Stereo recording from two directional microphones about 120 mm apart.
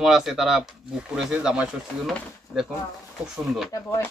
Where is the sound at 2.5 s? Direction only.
15° left (ahead or behind).